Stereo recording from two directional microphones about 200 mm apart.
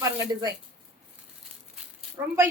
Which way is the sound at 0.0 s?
15° right (ahead or behind).